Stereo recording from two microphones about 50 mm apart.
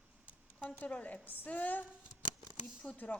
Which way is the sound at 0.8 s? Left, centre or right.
Left.